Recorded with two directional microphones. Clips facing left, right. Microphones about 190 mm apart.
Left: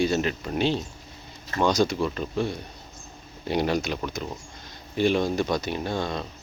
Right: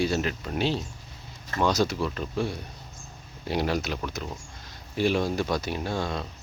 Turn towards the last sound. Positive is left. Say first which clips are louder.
# left 1 dB
turn(degrees=-5)  # may be behind; listen again after turning